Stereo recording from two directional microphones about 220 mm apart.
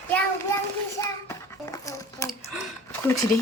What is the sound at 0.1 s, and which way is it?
Child singing, 15° left (ahead or behind).